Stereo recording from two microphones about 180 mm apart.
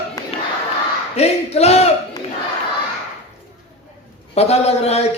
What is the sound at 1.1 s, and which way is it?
Speech, 35° left (ahead or behind).